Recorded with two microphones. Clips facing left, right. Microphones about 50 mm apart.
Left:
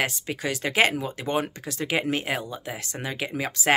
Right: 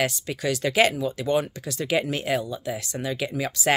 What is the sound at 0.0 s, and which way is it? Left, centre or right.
Speech, left.